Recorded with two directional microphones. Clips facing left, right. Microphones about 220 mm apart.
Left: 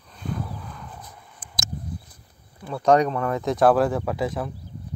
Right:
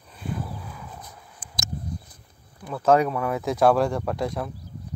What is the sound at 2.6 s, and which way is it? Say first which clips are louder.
Speech: left 1 dB; centre (ahead or behind).